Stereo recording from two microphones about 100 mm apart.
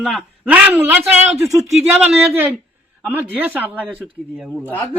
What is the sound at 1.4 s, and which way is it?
Speech, 30° right (ahead or behind).